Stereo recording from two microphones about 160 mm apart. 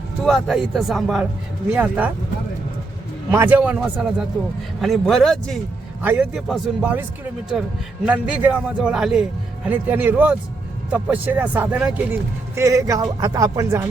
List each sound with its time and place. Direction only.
0.2 s a man's voice: centre (ahead or behind)
3.3 s a man's voice: 10° right (ahead or behind)
6.0 s a man's voice: 10° right (ahead or behind)
12.5 s speech: 20° right (ahead or behind)